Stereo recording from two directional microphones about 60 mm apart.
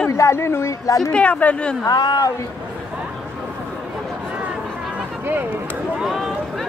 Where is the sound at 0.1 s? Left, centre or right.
Left.